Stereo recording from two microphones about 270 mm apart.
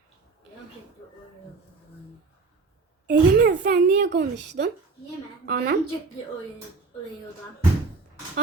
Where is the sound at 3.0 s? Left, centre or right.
Right.